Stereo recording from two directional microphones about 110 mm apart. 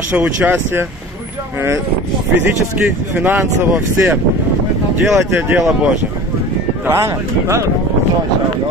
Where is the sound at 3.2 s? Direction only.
20° right (ahead or behind).